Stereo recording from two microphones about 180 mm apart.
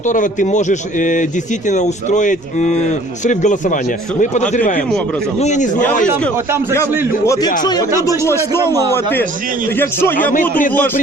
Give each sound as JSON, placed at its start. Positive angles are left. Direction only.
{"t": 0.0, "sound": "a man's voice", "side_deg": 45}
{"t": 6.3, "sound": "a man's voice", "side_deg": -15}
{"t": 7.6, "sound": "a man's voice", "side_deg": 20}